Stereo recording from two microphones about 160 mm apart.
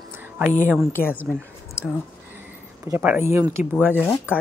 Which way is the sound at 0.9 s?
15° left (ahead or behind).